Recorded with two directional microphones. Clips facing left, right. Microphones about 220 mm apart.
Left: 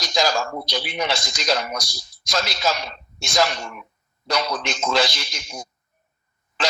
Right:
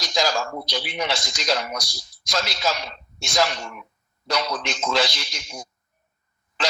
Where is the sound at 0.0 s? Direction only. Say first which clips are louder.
Left 2 dB; 45° left (ahead or behind).